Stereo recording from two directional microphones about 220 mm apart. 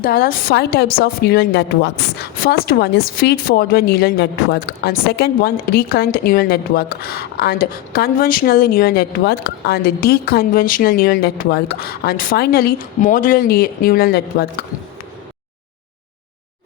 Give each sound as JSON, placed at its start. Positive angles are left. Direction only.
{"t": 0.0, "sound": "a woman's voice", "side_deg": 40}